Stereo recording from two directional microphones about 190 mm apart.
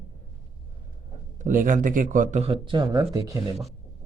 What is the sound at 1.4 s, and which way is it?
Speech, 45° right (ahead or behind).